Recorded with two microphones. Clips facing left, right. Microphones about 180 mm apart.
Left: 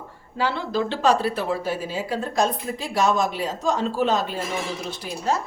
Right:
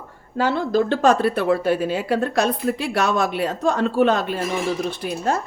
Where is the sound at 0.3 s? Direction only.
45° right (ahead or behind).